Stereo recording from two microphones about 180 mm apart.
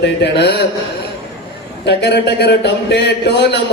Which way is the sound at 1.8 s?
65° left (ahead or behind).